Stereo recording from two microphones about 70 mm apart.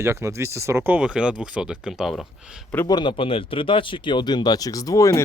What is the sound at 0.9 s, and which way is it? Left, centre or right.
Speech, centre.